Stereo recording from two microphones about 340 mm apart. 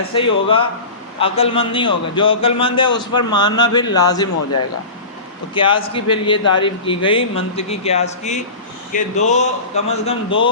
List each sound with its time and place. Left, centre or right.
0.1 s a man's voice: centre
5.5 s a man's voice: centre
10.2 s a man's voice: left